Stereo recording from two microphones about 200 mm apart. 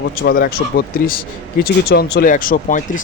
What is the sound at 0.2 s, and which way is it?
Speech, 50° left (ahead or behind).